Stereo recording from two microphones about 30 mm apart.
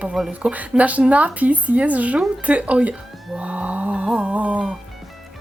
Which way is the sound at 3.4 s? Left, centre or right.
Right.